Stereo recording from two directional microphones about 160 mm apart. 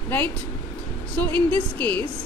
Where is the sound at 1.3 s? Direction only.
10° left (ahead or behind).